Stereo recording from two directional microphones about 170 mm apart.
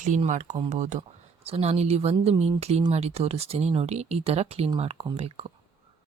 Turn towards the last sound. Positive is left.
turn(degrees=-35)  # may be behind; listen again after turning